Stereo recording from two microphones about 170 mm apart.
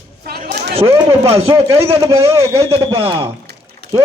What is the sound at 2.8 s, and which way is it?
Speech, 30° right (ahead or behind).